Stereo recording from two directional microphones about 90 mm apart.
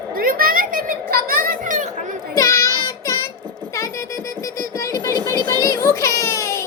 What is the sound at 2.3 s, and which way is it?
Child singing, 35° left (ahead or behind).